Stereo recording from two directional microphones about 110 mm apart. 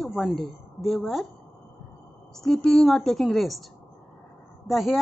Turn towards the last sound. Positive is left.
turn(degrees=0)  # may be behind; listen again after turning